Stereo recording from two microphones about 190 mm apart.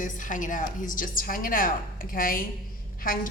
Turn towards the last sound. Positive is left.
turn(degrees=45)  # may be behind; listen again after turning